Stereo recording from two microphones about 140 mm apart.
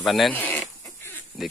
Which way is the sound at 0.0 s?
Centre (ahead or behind).